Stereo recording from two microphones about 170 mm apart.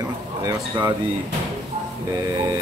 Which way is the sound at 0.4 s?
20° right (ahead or behind).